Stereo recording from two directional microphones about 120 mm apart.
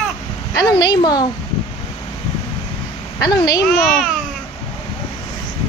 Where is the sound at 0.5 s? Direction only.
35° left (ahead or behind).